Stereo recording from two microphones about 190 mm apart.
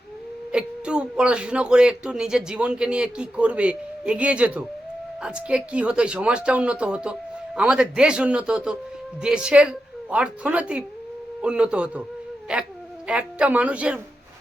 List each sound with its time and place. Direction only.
0.5 s speech: 5° right (ahead or behind)